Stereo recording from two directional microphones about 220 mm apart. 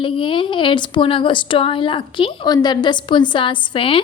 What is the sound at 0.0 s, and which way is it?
A woman's voice, 25° left (ahead or behind).